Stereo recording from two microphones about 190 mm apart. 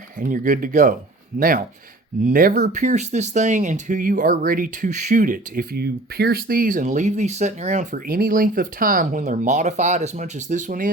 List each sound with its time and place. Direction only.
0.2 s speech: 45° right (ahead or behind)